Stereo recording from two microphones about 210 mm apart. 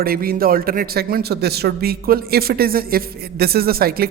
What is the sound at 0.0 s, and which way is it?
A man's voice, 45° right (ahead or behind).